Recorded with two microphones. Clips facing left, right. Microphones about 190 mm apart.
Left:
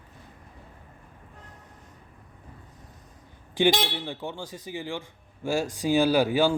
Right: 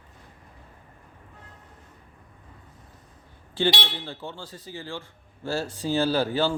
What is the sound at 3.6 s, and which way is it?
A man's voice, 15° left (ahead or behind).